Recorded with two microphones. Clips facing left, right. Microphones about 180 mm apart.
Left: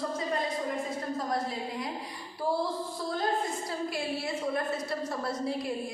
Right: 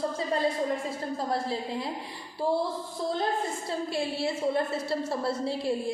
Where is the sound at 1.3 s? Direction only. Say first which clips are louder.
Right 2 dB; 30° right (ahead or behind).